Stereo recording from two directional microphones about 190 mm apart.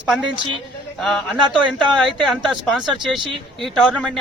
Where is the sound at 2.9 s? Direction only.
25° right (ahead or behind).